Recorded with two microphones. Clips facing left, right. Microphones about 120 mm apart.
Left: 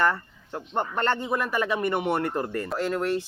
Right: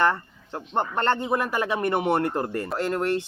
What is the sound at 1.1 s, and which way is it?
Speech, 30° right (ahead or behind).